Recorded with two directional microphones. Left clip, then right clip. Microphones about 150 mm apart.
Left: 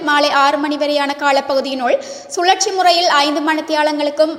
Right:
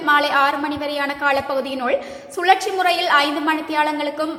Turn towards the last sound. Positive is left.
turn(degrees=30)  # may be behind; listen again after turning